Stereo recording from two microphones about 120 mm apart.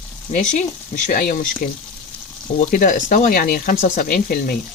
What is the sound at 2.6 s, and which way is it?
Speech, 90° left.